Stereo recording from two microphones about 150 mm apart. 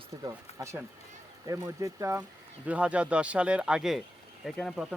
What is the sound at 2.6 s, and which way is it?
Speech, 10° right (ahead or behind).